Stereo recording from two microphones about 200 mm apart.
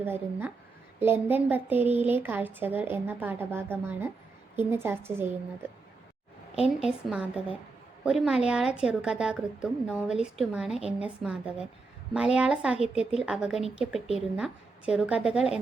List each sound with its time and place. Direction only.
0.0 s speech: 10° right (ahead or behind)
6.7 s speech: 5° right (ahead or behind)